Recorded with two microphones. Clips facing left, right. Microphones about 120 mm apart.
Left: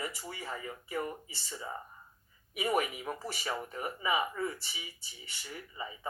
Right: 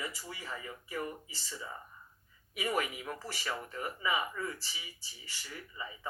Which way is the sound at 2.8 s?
25° left (ahead or behind).